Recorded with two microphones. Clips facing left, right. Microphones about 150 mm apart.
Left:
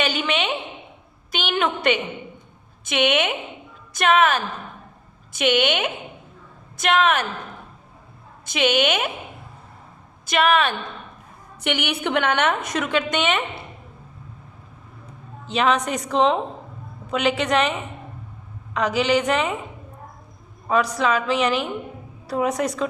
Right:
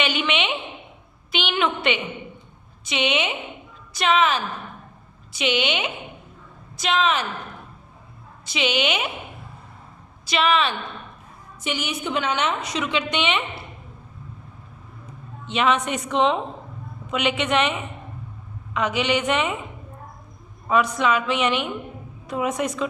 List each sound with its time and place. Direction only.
0.0 s a woman's voice: 40° left (ahead or behind); by 7.3 s 55° left (ahead or behind)
8.4 s a woman's voice: 50° left (ahead or behind)
10.2 s a woman's voice: 50° left (ahead or behind)
11.6 s a woman's voice: 65° left (ahead or behind); by 13.4 s 45° left (ahead or behind)
15.4 s a woman's voice: 35° left (ahead or behind)
20.7 s a woman's voice: 35° left (ahead or behind)